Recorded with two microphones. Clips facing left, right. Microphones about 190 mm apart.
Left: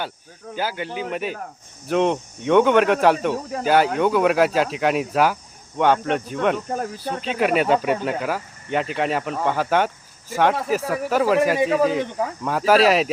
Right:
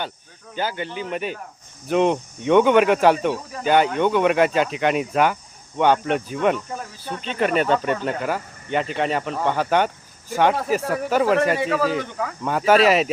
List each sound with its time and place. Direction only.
0.5 s speech: 5° left (ahead or behind)
11.9 s speech: 25° left (ahead or behind)
12.4 s speech: centre (ahead or behind)